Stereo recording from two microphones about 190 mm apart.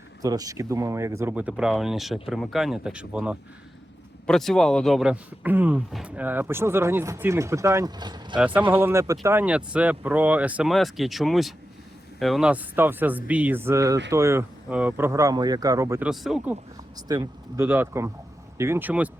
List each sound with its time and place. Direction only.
0.2 s speech: 20° right (ahead or behind)
16.0 s speech: 5° right (ahead or behind)
17.1 s speech: 15° right (ahead or behind)